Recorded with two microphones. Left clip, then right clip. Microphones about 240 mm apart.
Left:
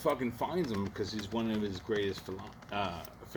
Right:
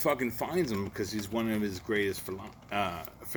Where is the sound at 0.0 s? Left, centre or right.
Right.